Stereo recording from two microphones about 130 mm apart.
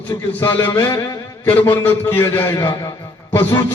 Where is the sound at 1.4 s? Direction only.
15° left (ahead or behind).